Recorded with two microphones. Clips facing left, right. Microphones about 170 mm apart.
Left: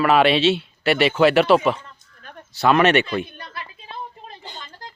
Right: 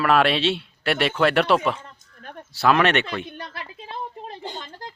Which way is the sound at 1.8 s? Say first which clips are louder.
Right 2 dB; 45° right (ahead or behind).